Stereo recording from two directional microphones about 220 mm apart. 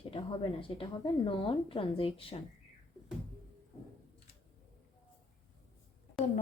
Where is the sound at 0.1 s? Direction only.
25° left (ahead or behind).